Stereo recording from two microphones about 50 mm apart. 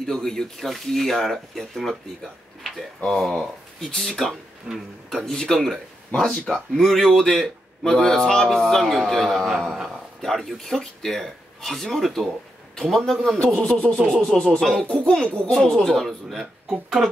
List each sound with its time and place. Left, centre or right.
0.0 s speech: centre
3.0 s speech: centre
9.5 s speech: centre
10.2 s speech: centre
13.6 s a sound: left
14.0 s speech: centre
15.5 s speech: centre